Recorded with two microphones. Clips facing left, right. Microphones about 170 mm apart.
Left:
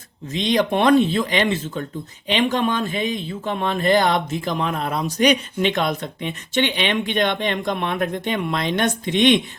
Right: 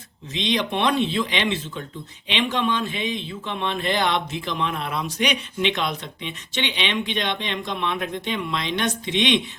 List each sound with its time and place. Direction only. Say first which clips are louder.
0.3 s speech: left 5 dB; 45° left (ahead or behind)